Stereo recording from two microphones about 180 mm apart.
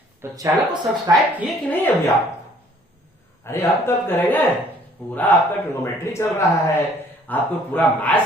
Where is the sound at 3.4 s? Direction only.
15° left (ahead or behind).